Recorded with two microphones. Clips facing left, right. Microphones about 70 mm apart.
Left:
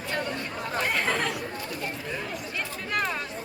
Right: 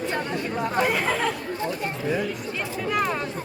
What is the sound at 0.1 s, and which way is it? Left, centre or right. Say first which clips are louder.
Chatter: right 4 dB; right.